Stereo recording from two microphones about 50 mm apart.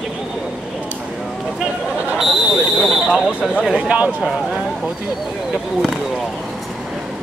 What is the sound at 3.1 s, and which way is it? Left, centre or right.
Speech, centre.